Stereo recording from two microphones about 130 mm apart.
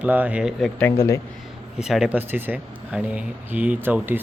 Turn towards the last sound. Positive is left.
turn(degrees=-15)  # may be behind; listen again after turning